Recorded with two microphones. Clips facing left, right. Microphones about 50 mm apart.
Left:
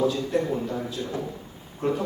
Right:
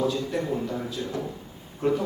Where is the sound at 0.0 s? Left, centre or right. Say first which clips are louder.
Left 2 dB; centre.